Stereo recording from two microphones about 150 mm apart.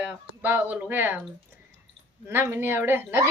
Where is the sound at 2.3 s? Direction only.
15° right (ahead or behind).